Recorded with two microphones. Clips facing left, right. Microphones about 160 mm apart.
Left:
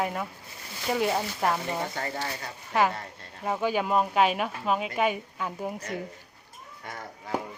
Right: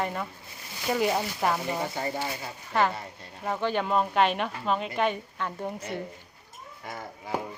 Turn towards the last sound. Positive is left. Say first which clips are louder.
# even
turn(degrees=-5)  # may be behind; listen again after turning